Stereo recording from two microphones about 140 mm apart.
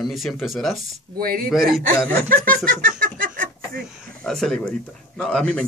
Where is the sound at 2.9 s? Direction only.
85° right.